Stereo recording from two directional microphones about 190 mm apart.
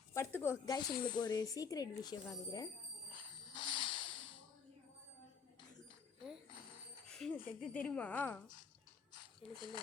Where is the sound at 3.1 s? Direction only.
25° left (ahead or behind).